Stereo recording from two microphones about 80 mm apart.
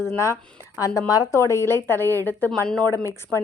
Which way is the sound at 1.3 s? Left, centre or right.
Left.